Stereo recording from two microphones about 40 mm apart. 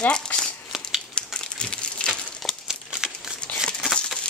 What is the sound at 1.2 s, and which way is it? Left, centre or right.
Crushing, left.